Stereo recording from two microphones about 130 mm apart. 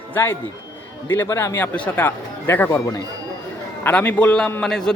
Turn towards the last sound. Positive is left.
turn(degrees=5)  # may be behind; listen again after turning